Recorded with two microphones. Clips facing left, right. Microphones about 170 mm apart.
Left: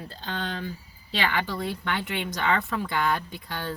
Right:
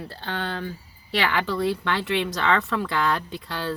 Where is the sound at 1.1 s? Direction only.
75° right (ahead or behind).